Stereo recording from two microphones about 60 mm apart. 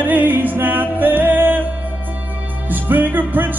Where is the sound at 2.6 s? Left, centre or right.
Right.